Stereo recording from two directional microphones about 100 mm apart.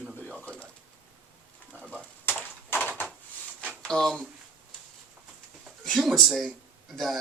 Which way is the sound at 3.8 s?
5° left (ahead or behind).